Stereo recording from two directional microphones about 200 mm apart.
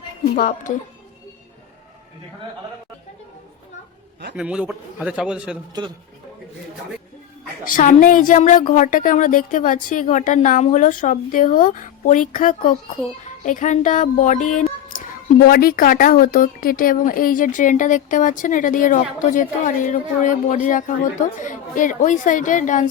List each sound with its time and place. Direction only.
0.3 s speech: 45° left (ahead or behind)
4.4 s a man's voice: 5° right (ahead or behind)
7.6 s speech: 40° left (ahead or behind)